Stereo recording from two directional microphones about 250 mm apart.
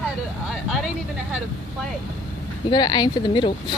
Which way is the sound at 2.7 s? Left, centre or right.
Centre.